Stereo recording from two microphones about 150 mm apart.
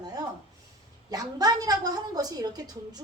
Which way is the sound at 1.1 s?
25° right (ahead or behind).